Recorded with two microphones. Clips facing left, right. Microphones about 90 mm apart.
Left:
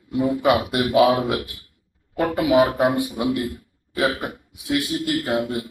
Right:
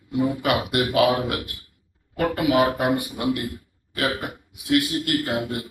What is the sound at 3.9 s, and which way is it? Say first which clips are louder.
Hiccup: left 3 dB; 20° left (ahead or behind).